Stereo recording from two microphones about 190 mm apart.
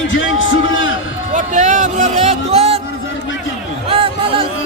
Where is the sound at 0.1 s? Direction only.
90° left.